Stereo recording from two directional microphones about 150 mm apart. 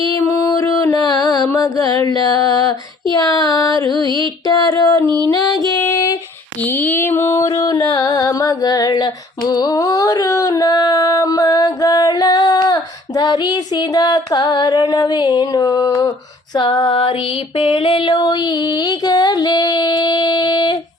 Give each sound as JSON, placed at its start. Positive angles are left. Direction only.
{"t": 0.0, "sound": "music", "side_deg": 20}
{"t": 5.7, "sound": "female singing", "side_deg": 20}
{"t": 6.6, "sound": "music", "side_deg": 10}
{"t": 16.6, "sound": "female singing", "side_deg": 30}
{"t": 17.6, "sound": "music", "side_deg": 35}